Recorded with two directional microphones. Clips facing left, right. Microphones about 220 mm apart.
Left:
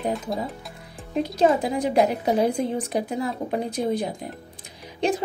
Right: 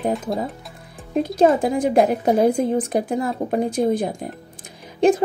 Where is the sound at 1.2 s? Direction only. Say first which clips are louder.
Right 4 dB; 50° right (ahead or behind).